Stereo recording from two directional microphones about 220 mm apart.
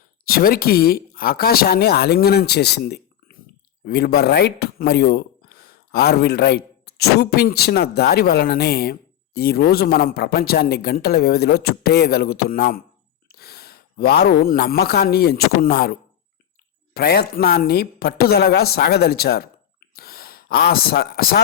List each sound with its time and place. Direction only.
0.3 s speech: 45° left (ahead or behind)